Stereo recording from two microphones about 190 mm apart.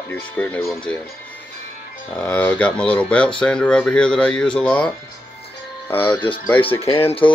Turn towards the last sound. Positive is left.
turn(degrees=30)  # may be behind; listen again after turning